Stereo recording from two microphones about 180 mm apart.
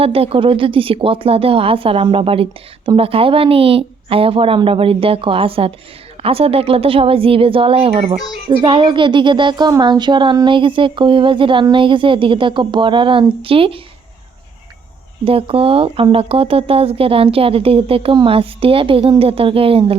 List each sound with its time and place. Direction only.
0.0 s speech: 30° right (ahead or behind)
15.2 s speech: 30° right (ahead or behind)